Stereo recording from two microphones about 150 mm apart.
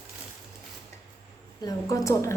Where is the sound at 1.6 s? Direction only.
25° left (ahead or behind).